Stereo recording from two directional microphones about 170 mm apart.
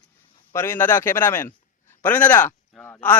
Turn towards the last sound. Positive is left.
turn(degrees=10)  # may be behind; listen again after turning